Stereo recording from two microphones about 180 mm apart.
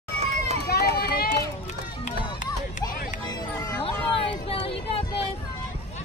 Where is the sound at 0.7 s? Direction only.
60° left (ahead or behind).